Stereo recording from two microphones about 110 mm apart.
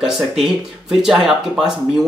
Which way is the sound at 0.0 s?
5° right (ahead or behind).